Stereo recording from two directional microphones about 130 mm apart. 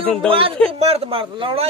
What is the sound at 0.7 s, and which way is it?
Speech, 50° right (ahead or behind).